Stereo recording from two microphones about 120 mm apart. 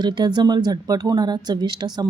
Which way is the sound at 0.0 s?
35° right (ahead or behind).